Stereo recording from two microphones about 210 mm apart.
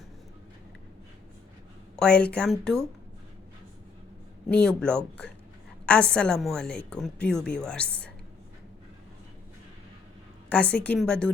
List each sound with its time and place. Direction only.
2.0 s a woman's voice: 5° left (ahead or behind)
4.4 s a woman's voice: 5° left (ahead or behind)
10.5 s a woman's voice: 5° left (ahead or behind)